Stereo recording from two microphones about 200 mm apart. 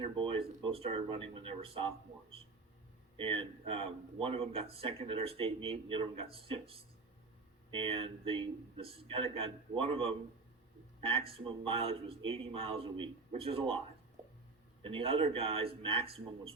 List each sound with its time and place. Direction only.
0.0 s speech: 25° right (ahead or behind)
11.3 s speech: 30° right (ahead or behind)